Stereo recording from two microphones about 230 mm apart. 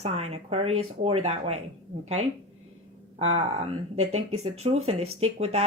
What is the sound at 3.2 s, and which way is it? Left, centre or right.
Speech, right.